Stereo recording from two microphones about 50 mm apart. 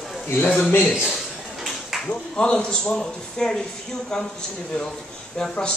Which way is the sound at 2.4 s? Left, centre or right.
Centre.